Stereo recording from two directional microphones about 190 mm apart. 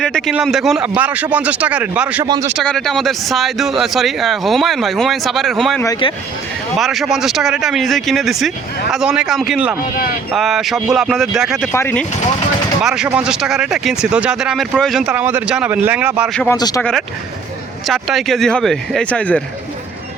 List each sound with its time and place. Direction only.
0.0 s speech: centre (ahead or behind)
2.2 s speech: 20° right (ahead or behind)
2.6 s speech: centre (ahead or behind)
5.8 s speech: 25° left (ahead or behind)
6.7 s speech: centre (ahead or behind)
11.7 s speech: 10° left (ahead or behind)
12.8 s speech: 5° right (ahead or behind)
16.3 s speech: 5° left (ahead or behind)
16.6 s speech: 20° left (ahead or behind)
17.8 s speech: centre (ahead or behind)